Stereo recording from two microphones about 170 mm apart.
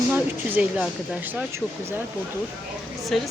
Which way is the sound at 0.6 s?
5° right (ahead or behind).